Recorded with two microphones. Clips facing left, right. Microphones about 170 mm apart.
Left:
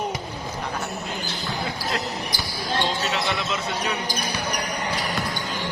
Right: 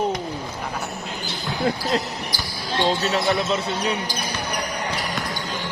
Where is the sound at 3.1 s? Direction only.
40° right (ahead or behind).